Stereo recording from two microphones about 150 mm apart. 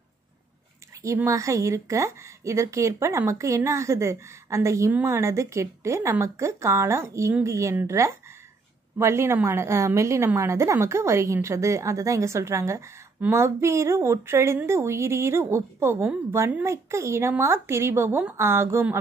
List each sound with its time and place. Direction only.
1.0 s a woman's voice: 20° right (ahead or behind)